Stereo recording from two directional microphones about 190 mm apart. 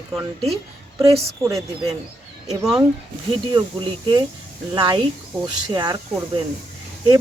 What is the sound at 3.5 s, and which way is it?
Speech, 25° right (ahead or behind).